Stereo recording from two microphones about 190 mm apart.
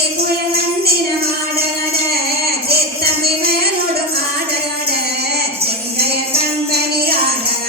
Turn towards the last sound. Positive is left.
turn(degrees=-55)  # may be behind; listen again after turning